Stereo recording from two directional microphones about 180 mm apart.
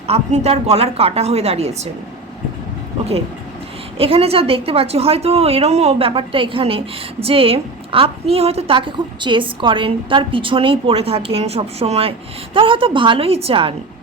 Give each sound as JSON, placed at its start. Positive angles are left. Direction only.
{"t": 0.1, "sound": "a woman's voice", "side_deg": -35}
{"t": 3.9, "sound": "a woman's voice", "side_deg": -30}